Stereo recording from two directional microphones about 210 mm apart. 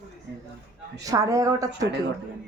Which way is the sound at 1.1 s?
15° right (ahead or behind).